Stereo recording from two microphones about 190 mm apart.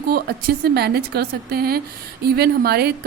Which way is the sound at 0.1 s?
55° right (ahead or behind).